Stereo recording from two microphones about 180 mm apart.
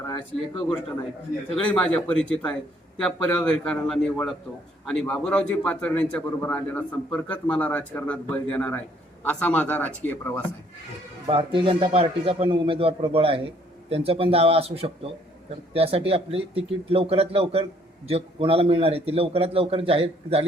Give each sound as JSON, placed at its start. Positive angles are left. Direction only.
{"t": 1.5, "sound": "a man's voice", "side_deg": 5}
{"t": 11.3, "sound": "a man's voice", "side_deg": -25}